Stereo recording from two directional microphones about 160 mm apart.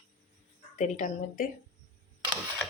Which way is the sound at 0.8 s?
50° left (ahead or behind).